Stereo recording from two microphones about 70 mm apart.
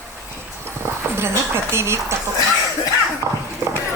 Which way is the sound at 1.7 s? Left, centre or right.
Right.